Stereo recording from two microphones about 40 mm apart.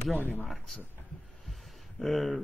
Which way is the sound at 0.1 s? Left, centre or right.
Left.